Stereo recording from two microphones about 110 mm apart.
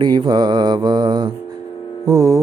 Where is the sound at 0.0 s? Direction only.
40° right (ahead or behind).